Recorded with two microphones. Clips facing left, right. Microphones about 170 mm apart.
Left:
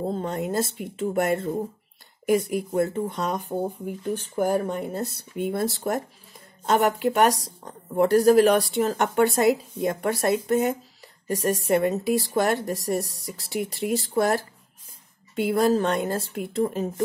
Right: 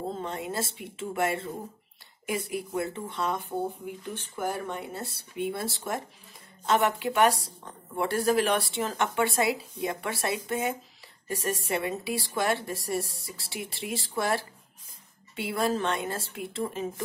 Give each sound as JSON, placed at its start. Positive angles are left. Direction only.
{"t": 0.1, "sound": "speech", "side_deg": 40}